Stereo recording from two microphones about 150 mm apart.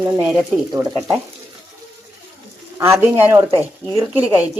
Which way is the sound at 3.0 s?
15° right (ahead or behind).